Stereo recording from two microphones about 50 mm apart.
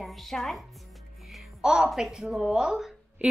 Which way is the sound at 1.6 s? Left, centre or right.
Centre.